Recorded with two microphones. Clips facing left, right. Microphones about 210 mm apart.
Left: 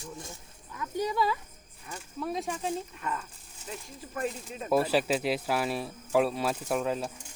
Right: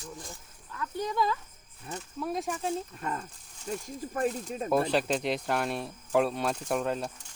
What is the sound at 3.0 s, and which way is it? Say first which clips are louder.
Speech: right 1 dB; 40° right (ahead or behind).